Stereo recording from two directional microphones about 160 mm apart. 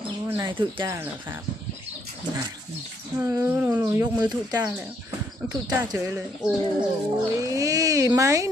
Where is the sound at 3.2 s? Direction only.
15° right (ahead or behind).